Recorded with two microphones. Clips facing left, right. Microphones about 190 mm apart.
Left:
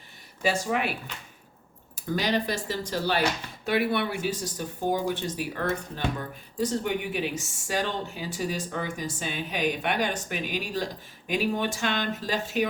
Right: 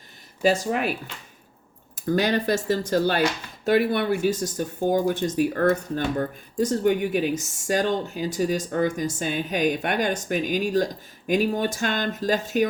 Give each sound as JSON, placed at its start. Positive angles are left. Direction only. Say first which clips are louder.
{"t": 0.4, "sound": "speech", "louder": "right 5 dB", "side_deg": -40}
{"t": 2.0, "sound": "speech", "louder": "right 5 dB", "side_deg": -50}